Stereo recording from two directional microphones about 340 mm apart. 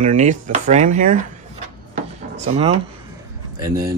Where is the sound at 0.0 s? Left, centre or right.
Right.